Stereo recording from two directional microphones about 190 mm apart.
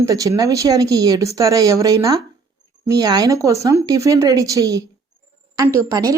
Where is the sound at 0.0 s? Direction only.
15° right (ahead or behind).